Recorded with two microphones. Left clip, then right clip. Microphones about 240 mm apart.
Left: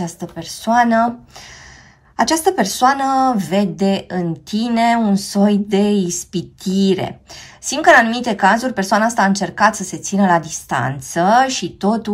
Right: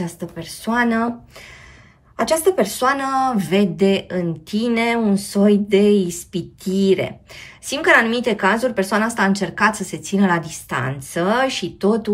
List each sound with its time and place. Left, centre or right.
0.0 s speech: centre
2.1 s speech: left